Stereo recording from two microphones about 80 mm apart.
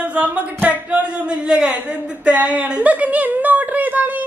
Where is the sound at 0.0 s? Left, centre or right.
Centre.